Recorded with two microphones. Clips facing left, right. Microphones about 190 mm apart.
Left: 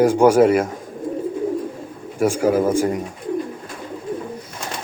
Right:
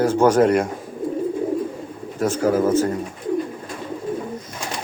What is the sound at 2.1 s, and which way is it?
Speech, 10° left (ahead or behind).